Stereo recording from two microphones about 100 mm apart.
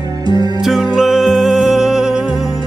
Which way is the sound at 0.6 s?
5° right (ahead or behind).